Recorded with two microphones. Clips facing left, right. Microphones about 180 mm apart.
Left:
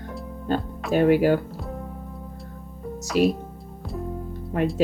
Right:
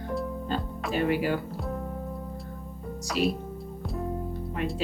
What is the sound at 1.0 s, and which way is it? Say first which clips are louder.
Speech: left 8 dB; 50° left (ahead or behind).